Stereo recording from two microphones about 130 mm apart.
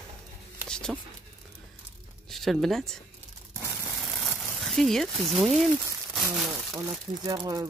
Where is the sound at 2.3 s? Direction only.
Centre (ahead or behind).